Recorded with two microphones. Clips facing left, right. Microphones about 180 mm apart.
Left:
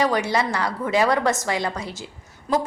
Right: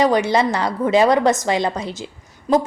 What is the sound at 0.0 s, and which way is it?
A woman's voice, 20° right (ahead or behind).